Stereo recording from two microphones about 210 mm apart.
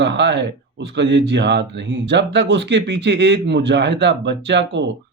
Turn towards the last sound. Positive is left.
turn(degrees=-55)  # may be behind; listen again after turning